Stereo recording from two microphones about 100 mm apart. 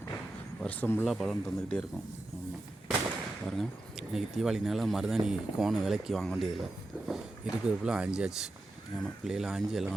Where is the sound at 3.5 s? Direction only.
Centre (ahead or behind).